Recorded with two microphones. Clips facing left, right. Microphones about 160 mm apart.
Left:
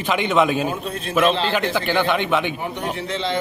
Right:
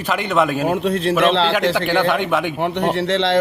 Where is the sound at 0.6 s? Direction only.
80° right.